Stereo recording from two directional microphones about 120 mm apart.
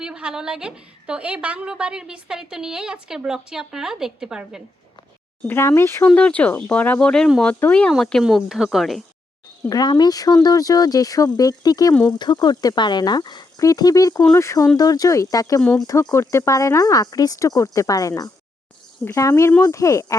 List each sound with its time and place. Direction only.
0.0 s a woman's voice: 5° right (ahead or behind)
5.5 s speech: 20° left (ahead or behind)
6.1 s speech: 10° left (ahead or behind)
9.6 s speech: 35° left (ahead or behind)